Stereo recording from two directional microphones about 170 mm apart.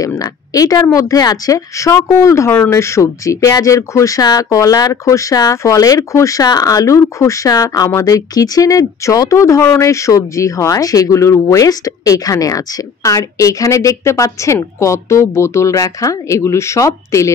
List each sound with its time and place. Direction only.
0.2 s speech: 20° left (ahead or behind)